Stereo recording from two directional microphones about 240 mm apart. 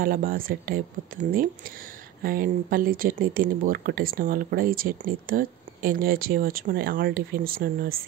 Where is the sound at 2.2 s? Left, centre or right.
Right.